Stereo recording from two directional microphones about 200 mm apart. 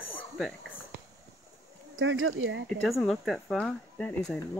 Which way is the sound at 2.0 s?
75° right (ahead or behind).